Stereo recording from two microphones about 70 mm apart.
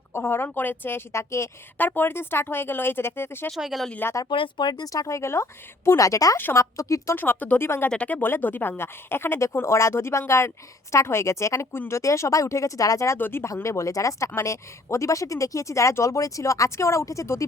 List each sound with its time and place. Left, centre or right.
0.1 s speech: left
1.8 s speech: left
3.5 s speech: centre
4.5 s a woman's voice: left
6.3 s a woman's voice: left
7.2 s a woman's voice: left
13.1 s speech: left
13.4 s a woman's voice: left